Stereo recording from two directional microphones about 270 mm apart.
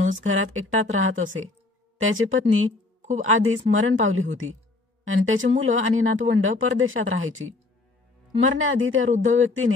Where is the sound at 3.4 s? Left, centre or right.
Right.